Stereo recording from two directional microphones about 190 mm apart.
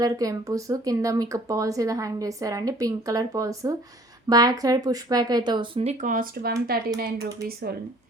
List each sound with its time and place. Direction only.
0.0 s speech: 20° right (ahead or behind); by 7.8 s 55° right (ahead or behind)